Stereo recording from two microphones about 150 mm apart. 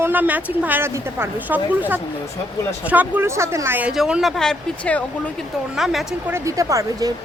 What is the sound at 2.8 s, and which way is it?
Speech, 10° right (ahead or behind).